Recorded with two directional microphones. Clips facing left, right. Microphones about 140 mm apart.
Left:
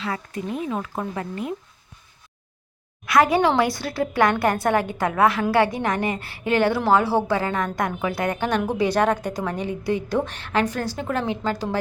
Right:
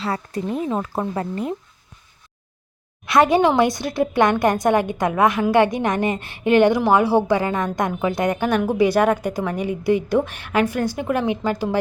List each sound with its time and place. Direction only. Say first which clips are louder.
0.0 s speech: right 4 dB; 35° right (ahead or behind)
3.1 s a woman's voice: right 2 dB; 25° right (ahead or behind)